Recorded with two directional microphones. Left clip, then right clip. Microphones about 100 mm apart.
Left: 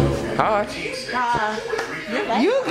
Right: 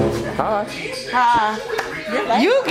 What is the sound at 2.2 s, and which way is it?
Speech, 45° right (ahead or behind).